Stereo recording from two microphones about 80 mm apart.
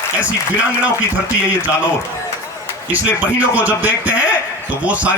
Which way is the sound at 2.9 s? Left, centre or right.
Centre.